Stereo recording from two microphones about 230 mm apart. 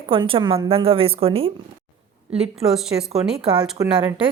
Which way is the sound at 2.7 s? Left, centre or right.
Centre.